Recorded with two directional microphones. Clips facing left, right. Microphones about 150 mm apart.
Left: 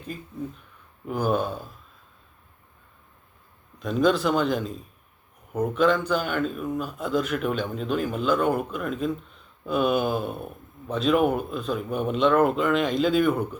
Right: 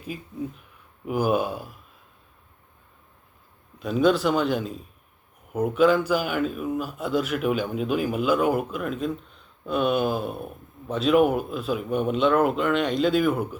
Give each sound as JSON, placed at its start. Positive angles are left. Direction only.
{"t": 0.0, "sound": "speech", "side_deg": -10}
{"t": 3.8, "sound": "a man's voice", "side_deg": -5}